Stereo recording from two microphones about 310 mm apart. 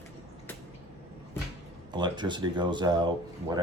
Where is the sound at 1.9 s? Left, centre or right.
Centre.